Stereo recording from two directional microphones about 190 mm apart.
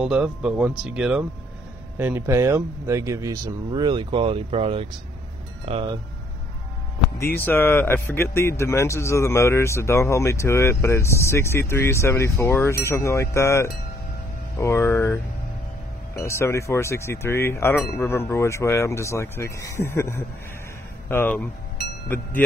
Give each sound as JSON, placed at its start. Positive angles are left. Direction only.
{"t": 0.0, "sound": "speech", "side_deg": -5}
{"t": 7.2, "sound": "speech", "side_deg": 10}
{"t": 16.2, "sound": "speech", "side_deg": 15}